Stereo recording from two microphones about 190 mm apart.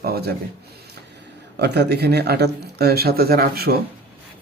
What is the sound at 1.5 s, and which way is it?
Speech, 60° right (ahead or behind).